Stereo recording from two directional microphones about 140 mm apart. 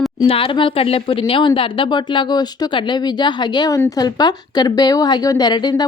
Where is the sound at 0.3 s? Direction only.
40° left (ahead or behind).